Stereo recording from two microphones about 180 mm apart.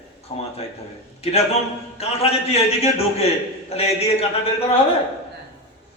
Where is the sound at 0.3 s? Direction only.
30° left (ahead or behind).